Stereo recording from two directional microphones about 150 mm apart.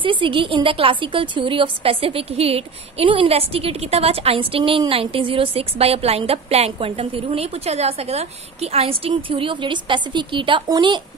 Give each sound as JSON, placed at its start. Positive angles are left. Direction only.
{"t": 0.0, "sound": "a woman's voice", "side_deg": -35}